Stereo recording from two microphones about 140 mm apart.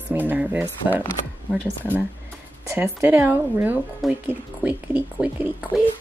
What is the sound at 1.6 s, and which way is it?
Speech, 10° left (ahead or behind).